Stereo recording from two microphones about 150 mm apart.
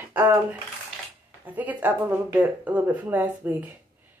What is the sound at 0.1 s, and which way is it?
Speech, 15° right (ahead or behind).